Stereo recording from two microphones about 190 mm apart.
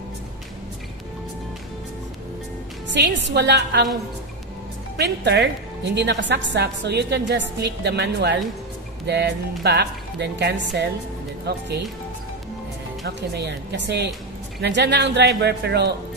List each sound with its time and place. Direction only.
2.9 s a woman's voice: 65° right (ahead or behind)
4.9 s a woman's voice: 60° right (ahead or behind)
13.0 s a woman's voice: 60° right (ahead or behind)